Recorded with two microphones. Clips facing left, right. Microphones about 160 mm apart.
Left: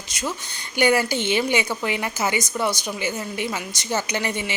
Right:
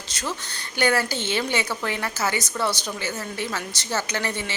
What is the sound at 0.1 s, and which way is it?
Speech, 10° left (ahead or behind).